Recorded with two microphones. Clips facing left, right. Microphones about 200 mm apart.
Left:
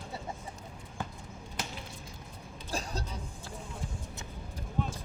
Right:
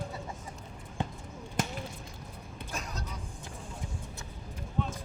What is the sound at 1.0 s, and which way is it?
Clip-clop, 25° right (ahead or behind).